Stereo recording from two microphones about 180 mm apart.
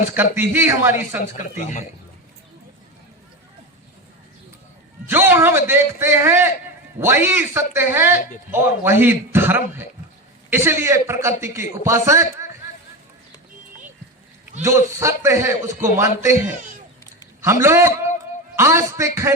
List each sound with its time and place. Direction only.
0.1 s a man's voice: 10° right (ahead or behind)
1.2 s speech: 45° left (ahead or behind)
5.0 s a man's voice: 10° right (ahead or behind)
14.6 s a man's voice: 15° right (ahead or behind)